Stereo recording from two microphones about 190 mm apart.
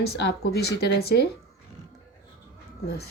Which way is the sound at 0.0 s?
60° left (ahead or behind).